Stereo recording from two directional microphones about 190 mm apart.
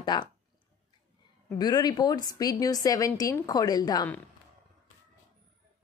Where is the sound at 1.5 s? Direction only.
20° left (ahead or behind).